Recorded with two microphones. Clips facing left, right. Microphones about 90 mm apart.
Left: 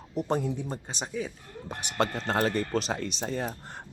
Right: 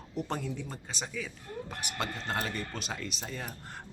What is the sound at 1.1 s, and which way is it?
A man's voice, 35° left (ahead or behind).